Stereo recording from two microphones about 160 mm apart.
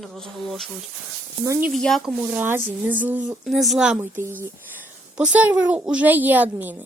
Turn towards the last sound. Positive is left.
turn(degrees=-10)  # may be behind; listen again after turning